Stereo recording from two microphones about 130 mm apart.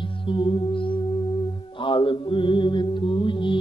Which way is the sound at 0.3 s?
40° left (ahead or behind).